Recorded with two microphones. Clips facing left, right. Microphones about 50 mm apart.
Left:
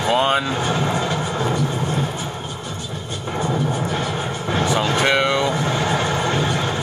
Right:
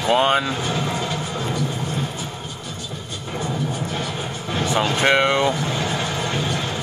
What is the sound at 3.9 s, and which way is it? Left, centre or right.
Music, left.